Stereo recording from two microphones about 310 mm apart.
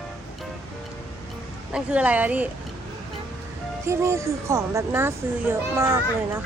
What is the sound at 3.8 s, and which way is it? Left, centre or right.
Speech, centre.